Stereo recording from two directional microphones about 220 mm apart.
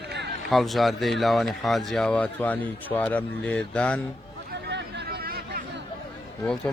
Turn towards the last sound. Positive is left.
turn(degrees=5)  # may be behind; listen again after turning